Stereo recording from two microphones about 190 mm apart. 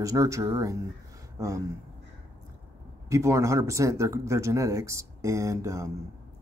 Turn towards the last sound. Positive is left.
turn(degrees=-15)  # may be behind; listen again after turning